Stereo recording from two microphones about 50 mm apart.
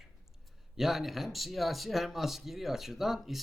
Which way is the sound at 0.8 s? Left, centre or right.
Centre.